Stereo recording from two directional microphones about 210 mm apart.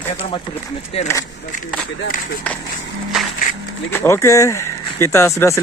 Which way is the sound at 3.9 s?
10° left (ahead or behind).